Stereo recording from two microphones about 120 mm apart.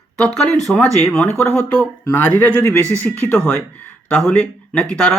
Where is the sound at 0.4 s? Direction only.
10° left (ahead or behind).